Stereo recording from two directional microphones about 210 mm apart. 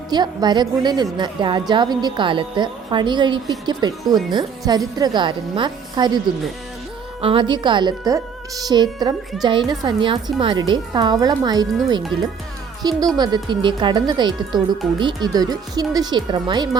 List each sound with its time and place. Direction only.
0.1 s a woman's voice: 20° right (ahead or behind)
7.2 s a woman's voice: 25° right (ahead or behind)
12.8 s a woman's voice: 20° right (ahead or behind)